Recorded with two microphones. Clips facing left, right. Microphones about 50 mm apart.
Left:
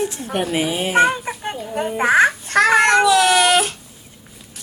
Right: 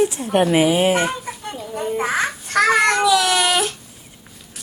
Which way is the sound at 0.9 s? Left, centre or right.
Left.